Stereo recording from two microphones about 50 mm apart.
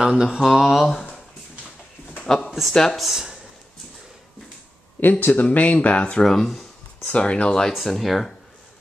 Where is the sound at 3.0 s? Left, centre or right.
Centre.